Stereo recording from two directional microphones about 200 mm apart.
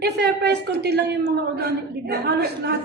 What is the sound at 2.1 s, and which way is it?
Speech, 55° right (ahead or behind).